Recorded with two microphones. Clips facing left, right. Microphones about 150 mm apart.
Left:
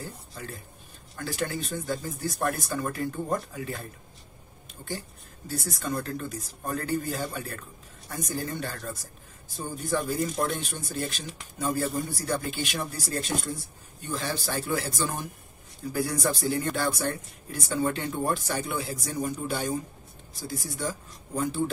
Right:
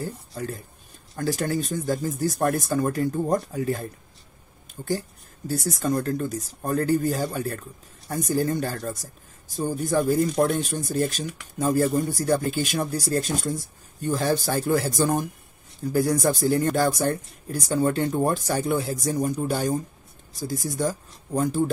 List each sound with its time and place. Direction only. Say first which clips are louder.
0.3 s speech: right 8 dB; 40° right (ahead or behind)
5.5 s speech: right 7 dB; 45° right (ahead or behind)